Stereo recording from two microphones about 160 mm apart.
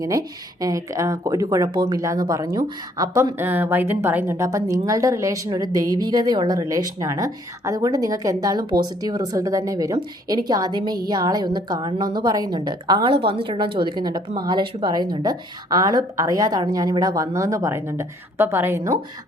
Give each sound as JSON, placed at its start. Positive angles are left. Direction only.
{"t": 0.0, "sound": "speech", "side_deg": -20}